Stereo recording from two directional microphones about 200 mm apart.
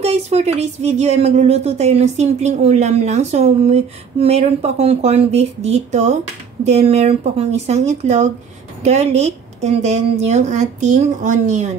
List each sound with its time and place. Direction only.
0.0 s speech: 35° right (ahead or behind)